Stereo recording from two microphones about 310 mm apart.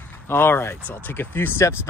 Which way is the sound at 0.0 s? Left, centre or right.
Centre.